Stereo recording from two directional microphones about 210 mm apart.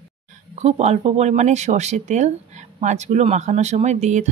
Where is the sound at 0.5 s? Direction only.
30° right (ahead or behind).